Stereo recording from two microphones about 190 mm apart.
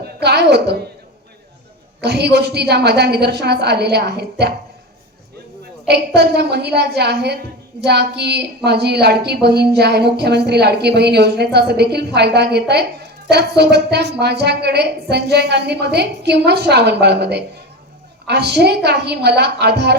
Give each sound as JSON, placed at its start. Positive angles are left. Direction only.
{"t": 0.0, "sound": "a woman's voice", "side_deg": -60}
{"t": 2.0, "sound": "a woman's voice", "side_deg": -60}
{"t": 5.9, "sound": "a woman's voice", "side_deg": -60}